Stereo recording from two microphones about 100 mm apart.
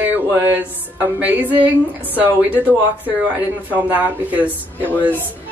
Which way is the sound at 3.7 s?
15° right (ahead or behind).